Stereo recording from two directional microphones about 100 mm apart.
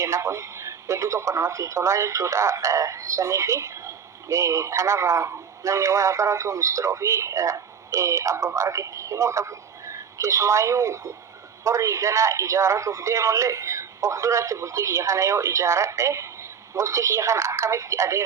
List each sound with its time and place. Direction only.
0.0 s speech: 30° right (ahead or behind)